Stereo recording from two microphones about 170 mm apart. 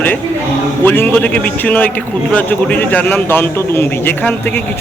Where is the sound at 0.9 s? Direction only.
10° left (ahead or behind).